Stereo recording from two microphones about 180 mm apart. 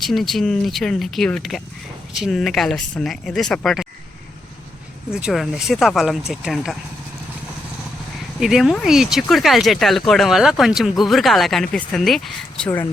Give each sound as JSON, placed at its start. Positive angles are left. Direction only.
{"t": 0.0, "sound": "speech", "side_deg": 0}
{"t": 5.1, "sound": "speech", "side_deg": 0}
{"t": 8.4, "sound": "speech", "side_deg": 0}